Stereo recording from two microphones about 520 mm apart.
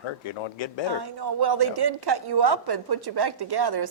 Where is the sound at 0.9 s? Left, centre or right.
Right.